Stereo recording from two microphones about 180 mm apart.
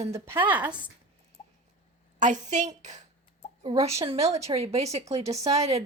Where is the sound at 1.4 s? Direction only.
40° left (ahead or behind).